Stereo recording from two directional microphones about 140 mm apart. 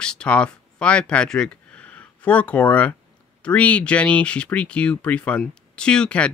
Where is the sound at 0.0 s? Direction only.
5° left (ahead or behind).